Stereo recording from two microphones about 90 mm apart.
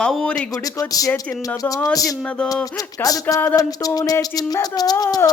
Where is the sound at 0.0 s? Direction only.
10° left (ahead or behind).